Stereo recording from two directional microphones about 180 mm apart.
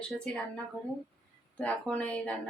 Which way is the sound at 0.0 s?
5° left (ahead or behind).